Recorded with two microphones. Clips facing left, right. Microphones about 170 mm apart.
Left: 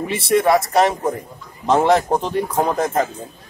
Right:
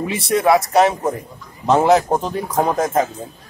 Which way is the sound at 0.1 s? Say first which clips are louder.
Even; centre (ahead or behind).